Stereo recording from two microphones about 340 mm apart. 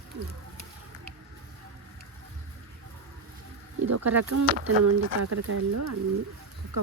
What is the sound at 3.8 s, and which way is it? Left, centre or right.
Speech, right.